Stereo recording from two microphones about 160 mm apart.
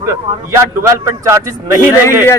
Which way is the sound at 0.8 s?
15° right (ahead or behind).